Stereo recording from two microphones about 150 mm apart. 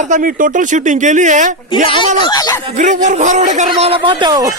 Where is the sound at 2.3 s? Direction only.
25° left (ahead or behind).